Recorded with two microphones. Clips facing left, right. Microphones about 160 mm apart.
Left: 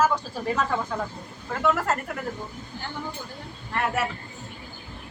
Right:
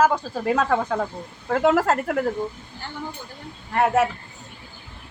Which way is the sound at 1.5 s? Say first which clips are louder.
Right 6 dB; 90° right.